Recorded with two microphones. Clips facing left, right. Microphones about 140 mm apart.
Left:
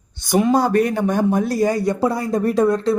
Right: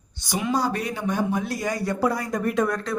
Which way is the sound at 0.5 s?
50° left (ahead or behind).